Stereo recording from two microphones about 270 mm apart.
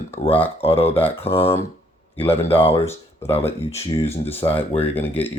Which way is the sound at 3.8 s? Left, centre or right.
Left.